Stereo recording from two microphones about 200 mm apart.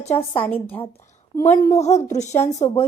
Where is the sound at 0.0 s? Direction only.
30° left (ahead or behind).